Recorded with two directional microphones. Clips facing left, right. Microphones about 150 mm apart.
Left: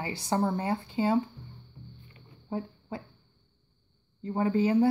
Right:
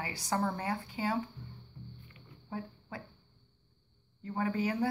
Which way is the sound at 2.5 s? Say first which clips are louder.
Left 6 dB; 30° left (ahead or behind).